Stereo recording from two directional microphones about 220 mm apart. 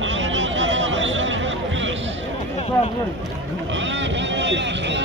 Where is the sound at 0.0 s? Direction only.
60° right (ahead or behind).